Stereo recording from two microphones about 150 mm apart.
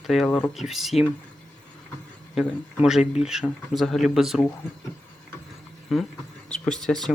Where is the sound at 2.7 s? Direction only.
5° right (ahead or behind).